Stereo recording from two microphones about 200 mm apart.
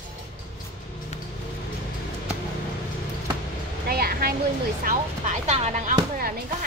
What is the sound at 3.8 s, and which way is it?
Speech, 50° right (ahead or behind).